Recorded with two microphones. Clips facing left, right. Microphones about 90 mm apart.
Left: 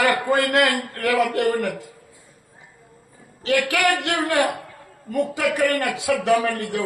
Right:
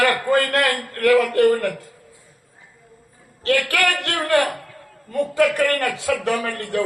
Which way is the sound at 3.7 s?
15° left (ahead or behind).